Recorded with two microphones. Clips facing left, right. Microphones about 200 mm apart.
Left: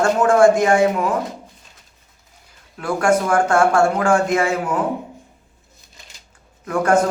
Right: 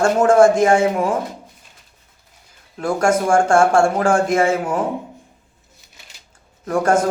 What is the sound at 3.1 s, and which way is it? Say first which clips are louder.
Speech: right 1 dB; 25° right (ahead or behind).